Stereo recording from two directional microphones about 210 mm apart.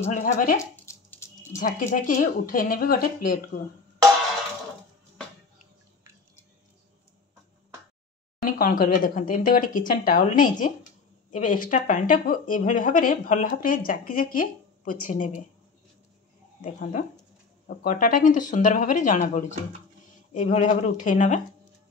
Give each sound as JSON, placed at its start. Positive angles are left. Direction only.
{"t": 0.0, "sound": "speech", "side_deg": 35}
{"t": 0.6, "sound": "a sound", "side_deg": 15}
{"t": 1.6, "sound": "speech", "side_deg": 40}
{"t": 8.5, "sound": "speech", "side_deg": 40}
{"t": 16.6, "sound": "speech", "side_deg": 40}